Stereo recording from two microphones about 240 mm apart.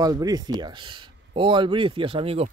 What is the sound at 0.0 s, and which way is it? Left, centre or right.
Speech, centre.